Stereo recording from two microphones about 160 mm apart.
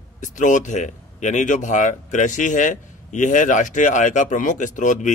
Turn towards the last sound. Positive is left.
turn(degrees=50)  # may be behind; listen again after turning